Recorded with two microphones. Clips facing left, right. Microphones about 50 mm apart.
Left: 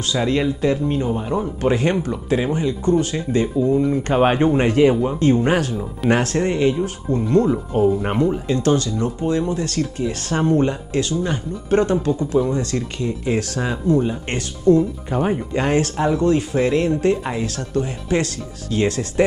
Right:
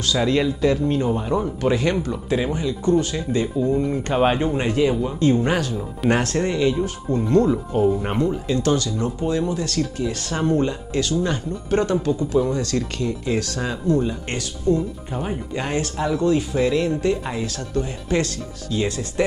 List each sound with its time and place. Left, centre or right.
0.1 s speech: left
1.6 s speech: left
3.7 s speech: centre
4.1 s speech: left
7.2 s speech: left
7.7 s speech: left
10.6 s speech: left